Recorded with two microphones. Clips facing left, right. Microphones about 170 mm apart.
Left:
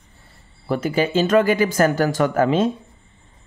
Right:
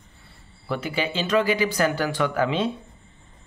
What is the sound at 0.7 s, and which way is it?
Speech, 45° left (ahead or behind).